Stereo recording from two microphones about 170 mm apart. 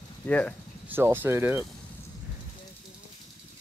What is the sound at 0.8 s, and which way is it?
Speech, 10° right (ahead or behind).